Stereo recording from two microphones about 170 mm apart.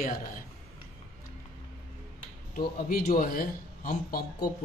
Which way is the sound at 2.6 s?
60° left (ahead or behind).